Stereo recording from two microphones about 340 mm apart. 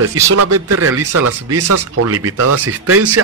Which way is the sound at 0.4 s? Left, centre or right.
Right.